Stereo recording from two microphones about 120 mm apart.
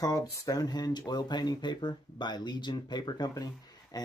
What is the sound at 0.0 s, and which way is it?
Speech, 30° left (ahead or behind).